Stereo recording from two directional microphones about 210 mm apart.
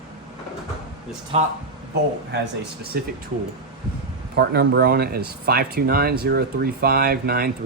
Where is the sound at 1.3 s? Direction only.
30° right (ahead or behind).